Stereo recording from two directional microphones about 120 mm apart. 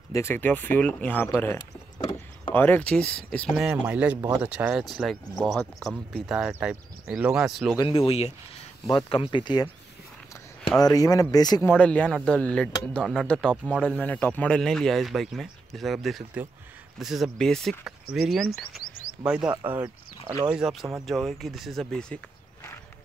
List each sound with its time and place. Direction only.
0.1 s speech: 20° left (ahead or behind)
3.5 s speech: 10° right (ahead or behind)
5.6 s speech: 5° left (ahead or behind)
7.8 s speech: 50° left (ahead or behind)
8.9 s speech: 40° left (ahead or behind)
10.9 s speech: 30° left (ahead or behind)
11.8 s speech: 10° left (ahead or behind); by 20.3 s 15° right (ahead or behind)
20.4 s speech: 5° right (ahead or behind)